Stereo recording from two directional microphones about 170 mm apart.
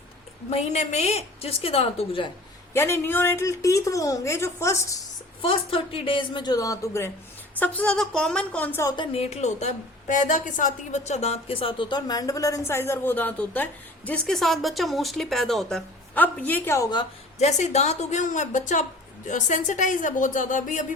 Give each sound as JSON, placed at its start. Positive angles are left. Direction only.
{"t": 0.5, "sound": "a woman's voice", "side_deg": 40}
{"t": 2.7, "sound": "a woman's voice", "side_deg": 15}
{"t": 5.4, "sound": "a woman's voice", "side_deg": 30}
{"t": 8.9, "sound": "a woman's voice", "side_deg": 30}
{"t": 17.4, "sound": "a woman's voice", "side_deg": 40}